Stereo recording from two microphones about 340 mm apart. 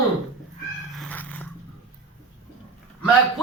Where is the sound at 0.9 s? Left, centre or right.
Centre.